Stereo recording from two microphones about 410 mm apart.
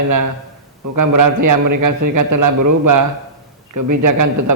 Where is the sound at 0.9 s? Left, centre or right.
Right.